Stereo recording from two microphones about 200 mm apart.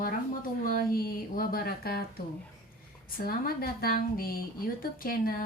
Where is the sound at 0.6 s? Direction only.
45° left (ahead or behind).